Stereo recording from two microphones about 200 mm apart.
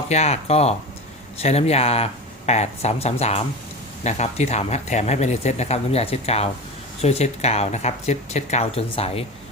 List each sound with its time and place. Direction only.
0.1 s speech: 35° left (ahead or behind)